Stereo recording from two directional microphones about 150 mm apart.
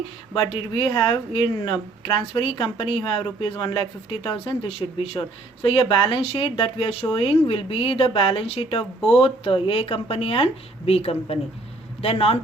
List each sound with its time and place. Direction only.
0.5 s speech: 35° left (ahead or behind)